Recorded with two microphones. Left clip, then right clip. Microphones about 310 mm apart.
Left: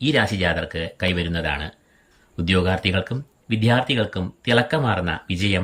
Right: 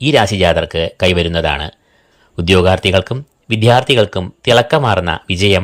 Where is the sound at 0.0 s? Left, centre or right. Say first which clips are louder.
Right 9 dB; centre.